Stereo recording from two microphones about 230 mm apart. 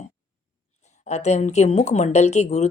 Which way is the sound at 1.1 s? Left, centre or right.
Left.